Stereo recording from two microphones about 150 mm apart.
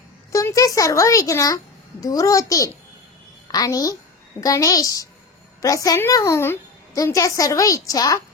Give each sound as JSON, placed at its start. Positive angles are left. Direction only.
{"t": 0.3, "sound": "a woman's voice", "side_deg": 20}